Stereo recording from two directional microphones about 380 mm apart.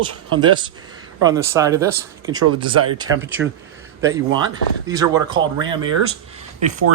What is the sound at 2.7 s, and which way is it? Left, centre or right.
Speech, right.